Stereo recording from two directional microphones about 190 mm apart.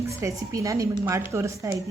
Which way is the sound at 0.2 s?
15° right (ahead or behind).